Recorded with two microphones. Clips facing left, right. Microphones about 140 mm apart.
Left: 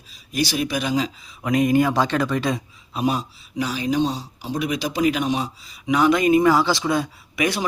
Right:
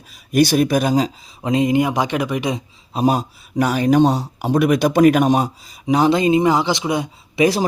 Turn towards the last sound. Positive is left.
turn(degrees=-35)  # may be behind; listen again after turning